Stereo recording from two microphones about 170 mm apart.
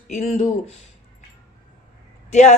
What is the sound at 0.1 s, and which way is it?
Speech, 40° left (ahead or behind).